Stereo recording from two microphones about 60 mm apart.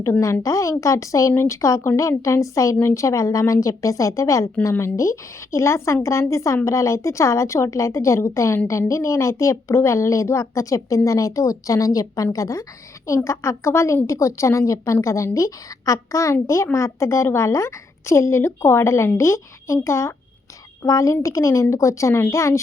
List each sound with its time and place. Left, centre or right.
0.4 s a woman's voice: left
20.8 s speech: left